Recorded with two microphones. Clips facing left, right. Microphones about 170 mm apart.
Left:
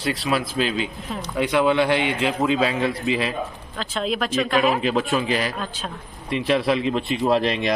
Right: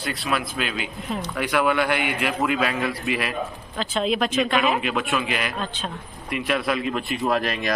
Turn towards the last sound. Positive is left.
turn(degrees=25)  # may be behind; listen again after turning